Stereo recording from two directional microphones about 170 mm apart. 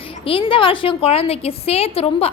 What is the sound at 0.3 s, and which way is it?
A woman's voice, 30° left (ahead or behind).